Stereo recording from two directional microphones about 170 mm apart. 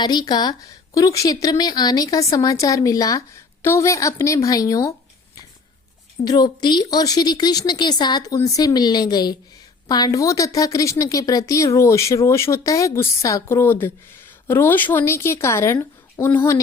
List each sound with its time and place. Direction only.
0.0 s a woman's voice: 25° left (ahead or behind)